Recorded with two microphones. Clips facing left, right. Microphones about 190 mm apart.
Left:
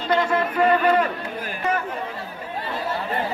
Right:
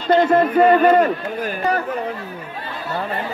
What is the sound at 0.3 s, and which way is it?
Speech, 45° right (ahead or behind).